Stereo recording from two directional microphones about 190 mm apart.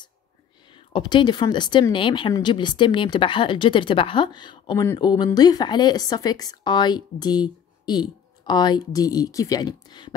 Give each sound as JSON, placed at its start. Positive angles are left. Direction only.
{"t": 0.7, "sound": "a woman's voice", "side_deg": 25}